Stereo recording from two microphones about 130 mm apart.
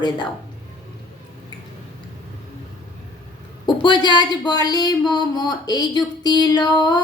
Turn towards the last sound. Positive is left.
turn(degrees=30)  # may be behind; listen again after turning